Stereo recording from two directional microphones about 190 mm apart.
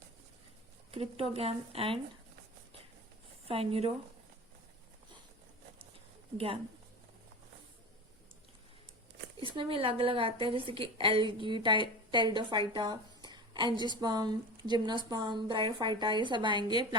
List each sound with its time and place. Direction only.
0.9 s a woman's voice: 30° right (ahead or behind)
3.4 s a woman's voice: 30° right (ahead or behind)
6.3 s a woman's voice: 30° right (ahead or behind)
9.4 s a woman's voice: 25° right (ahead or behind)